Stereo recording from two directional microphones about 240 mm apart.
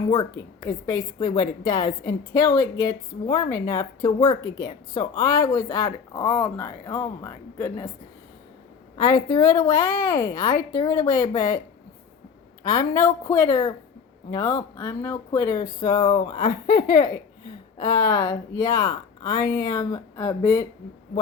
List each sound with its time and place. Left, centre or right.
0.1 s a woman's voice: centre
9.0 s a woman's voice: centre
12.6 s a woman's voice: centre